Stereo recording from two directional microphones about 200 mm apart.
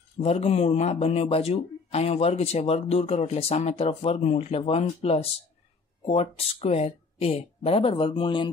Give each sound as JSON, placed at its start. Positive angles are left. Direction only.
{"t": 0.2, "sound": "speech", "side_deg": 30}